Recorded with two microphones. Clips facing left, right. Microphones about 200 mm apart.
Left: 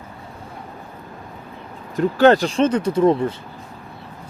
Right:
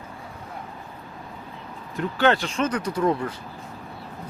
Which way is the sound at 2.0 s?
40° left (ahead or behind).